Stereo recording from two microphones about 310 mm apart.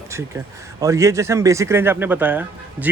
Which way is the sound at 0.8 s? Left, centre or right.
Centre.